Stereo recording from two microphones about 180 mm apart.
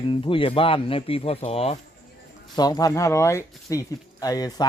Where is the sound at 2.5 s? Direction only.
20° left (ahead or behind).